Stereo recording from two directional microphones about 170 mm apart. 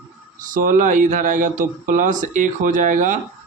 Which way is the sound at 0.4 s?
55° right (ahead or behind).